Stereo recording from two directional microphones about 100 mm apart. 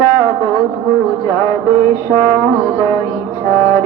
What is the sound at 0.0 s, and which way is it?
Music, 40° left (ahead or behind).